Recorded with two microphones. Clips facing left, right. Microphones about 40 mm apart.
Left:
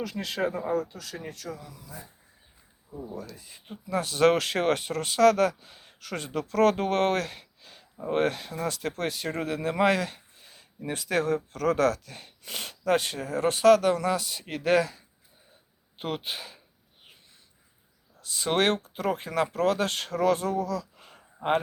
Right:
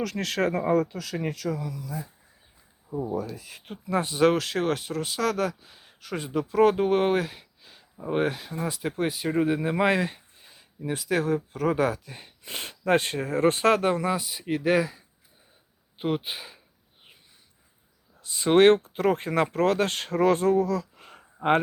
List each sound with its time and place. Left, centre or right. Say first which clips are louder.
0.0 s speech: right 3 dB; right
1.4 s speech: right 8 dB; right
2.9 s speech: right 9 dB; right
3.7 s speech: right 3 dB; right
4.1 s speech: left 1 dB; centre; by 10.2 s right
10.4 s a sound: even; centre
10.8 s speech: right 1 dB; centre
18.2 s speech: right 7 dB; right
21.0 s a sound: right 3 dB; right